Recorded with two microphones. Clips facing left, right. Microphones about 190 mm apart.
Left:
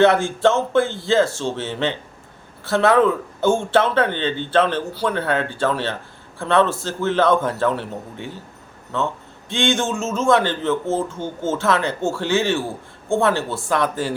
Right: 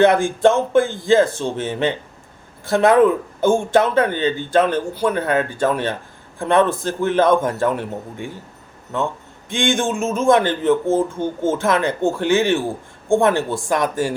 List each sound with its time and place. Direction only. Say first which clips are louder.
0.0 s speech: right 2 dB; 15° right (ahead or behind)
9.5 s speech: right 1 dB; 15° right (ahead or behind)